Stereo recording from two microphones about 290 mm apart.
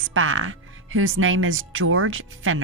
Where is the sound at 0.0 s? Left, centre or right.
Right.